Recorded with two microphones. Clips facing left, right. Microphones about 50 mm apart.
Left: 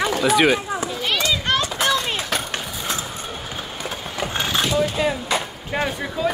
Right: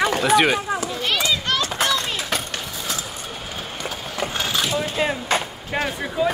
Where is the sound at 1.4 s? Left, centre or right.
Left.